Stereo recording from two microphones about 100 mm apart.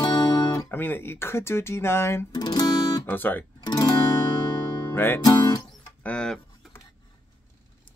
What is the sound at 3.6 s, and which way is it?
Music, 40° left (ahead or behind).